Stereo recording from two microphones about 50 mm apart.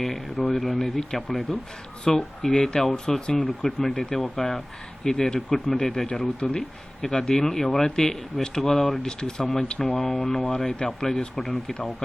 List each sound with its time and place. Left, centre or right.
0.0 s speech: centre
2.0 s speech: centre